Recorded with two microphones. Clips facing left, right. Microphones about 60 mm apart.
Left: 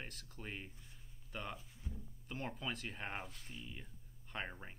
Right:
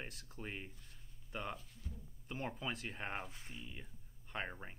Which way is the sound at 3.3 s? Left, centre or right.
Centre.